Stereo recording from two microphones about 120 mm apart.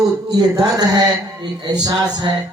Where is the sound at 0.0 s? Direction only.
30° right (ahead or behind).